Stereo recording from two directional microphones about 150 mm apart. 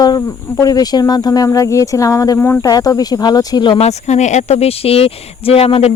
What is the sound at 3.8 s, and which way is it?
Speech, 50° left (ahead or behind).